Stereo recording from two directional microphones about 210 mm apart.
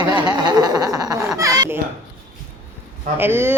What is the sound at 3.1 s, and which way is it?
Speech, 10° right (ahead or behind).